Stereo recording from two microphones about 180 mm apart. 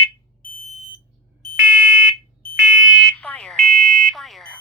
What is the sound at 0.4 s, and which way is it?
Smoke detector, 45° left (ahead or behind).